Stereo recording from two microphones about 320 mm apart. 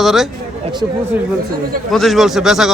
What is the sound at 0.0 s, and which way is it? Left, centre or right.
Speech, centre.